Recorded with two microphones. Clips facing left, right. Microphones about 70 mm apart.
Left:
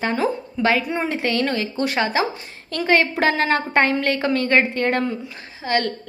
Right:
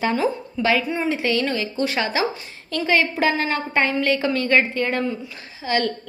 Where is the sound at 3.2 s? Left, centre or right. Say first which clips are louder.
Left 2 dB; left.